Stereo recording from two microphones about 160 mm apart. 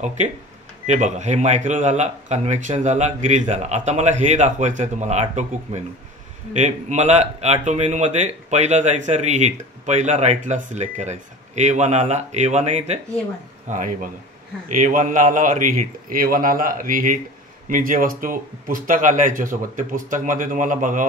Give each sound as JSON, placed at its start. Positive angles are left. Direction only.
{"t": 0.8, "sound": "speech", "side_deg": -50}
{"t": 13.7, "sound": "speech", "side_deg": -55}